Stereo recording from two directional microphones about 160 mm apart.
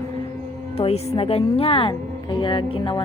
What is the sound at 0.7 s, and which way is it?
A woman's voice, 40° left (ahead or behind).